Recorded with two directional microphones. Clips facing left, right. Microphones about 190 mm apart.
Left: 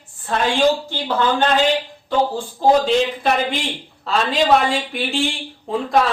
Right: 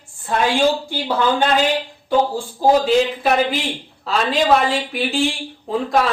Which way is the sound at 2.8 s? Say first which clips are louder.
Right 2 dB; 5° right (ahead or behind).